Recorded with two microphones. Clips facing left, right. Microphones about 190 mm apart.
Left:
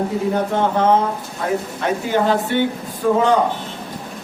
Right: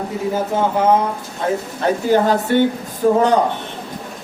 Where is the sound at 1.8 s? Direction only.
40° right (ahead or behind).